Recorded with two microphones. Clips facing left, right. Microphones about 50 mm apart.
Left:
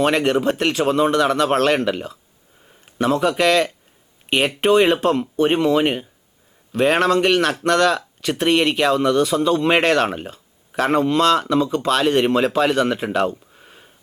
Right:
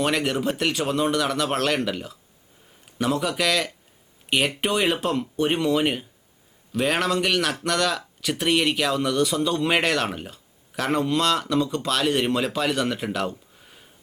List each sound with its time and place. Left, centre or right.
0.0 s speech: centre
4.6 s speech: centre
13.6 s a sound: centre